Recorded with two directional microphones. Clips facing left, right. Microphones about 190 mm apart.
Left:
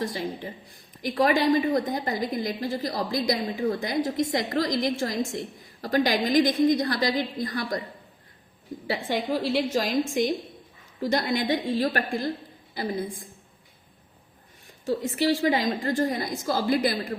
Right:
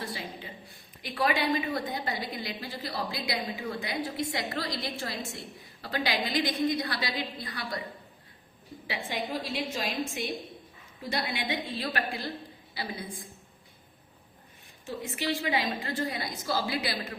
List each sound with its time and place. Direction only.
0.0 s a woman's voice: 45° left (ahead or behind)
8.9 s a woman's voice: 50° left (ahead or behind)
15.2 s a woman's voice: 45° left (ahead or behind)